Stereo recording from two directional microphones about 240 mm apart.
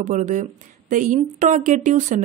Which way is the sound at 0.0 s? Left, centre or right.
Right.